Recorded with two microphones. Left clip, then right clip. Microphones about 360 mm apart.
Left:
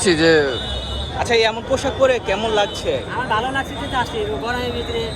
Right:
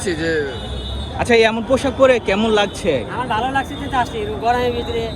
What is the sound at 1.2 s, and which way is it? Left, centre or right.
Speech, centre.